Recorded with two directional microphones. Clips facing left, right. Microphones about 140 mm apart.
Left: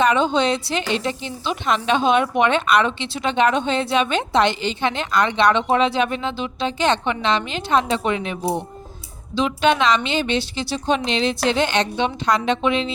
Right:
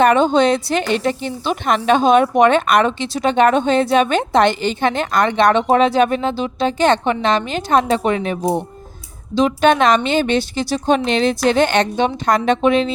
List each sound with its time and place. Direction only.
0.0 s speech: 50° right (ahead or behind)